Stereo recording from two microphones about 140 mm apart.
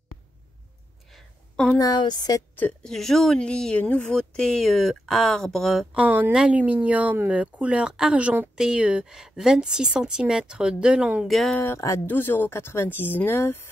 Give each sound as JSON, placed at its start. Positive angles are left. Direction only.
{"t": 1.1, "sound": "a sound", "side_deg": 5}
{"t": 1.8, "sound": "a woman's voice", "side_deg": 30}
{"t": 2.5, "sound": "a woman's voice", "side_deg": 10}
{"t": 5.9, "sound": "speech", "side_deg": -10}
{"t": 11.6, "sound": "speech", "side_deg": 20}